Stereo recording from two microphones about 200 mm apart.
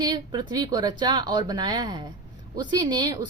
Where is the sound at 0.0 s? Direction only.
20° right (ahead or behind).